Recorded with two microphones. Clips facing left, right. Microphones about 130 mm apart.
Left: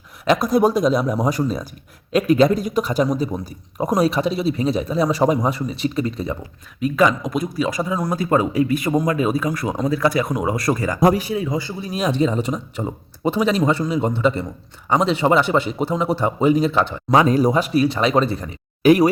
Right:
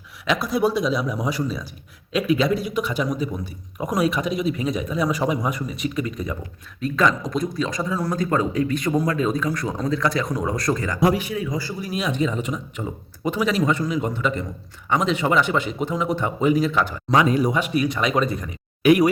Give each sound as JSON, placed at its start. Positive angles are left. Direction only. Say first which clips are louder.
{"t": 0.3, "sound": "a man's voice", "louder": "left 5 dB", "side_deg": 45}
{"t": 6.7, "sound": "speech", "louder": "left 3 dB", "side_deg": 10}
{"t": 7.8, "sound": "speech", "louder": "left 2 dB", "side_deg": 20}
{"t": 10.9, "sound": "a man's voice", "louder": "left 4 dB", "side_deg": 40}
{"t": 11.9, "sound": "a man's voice", "louder": "left 5 dB", "side_deg": 35}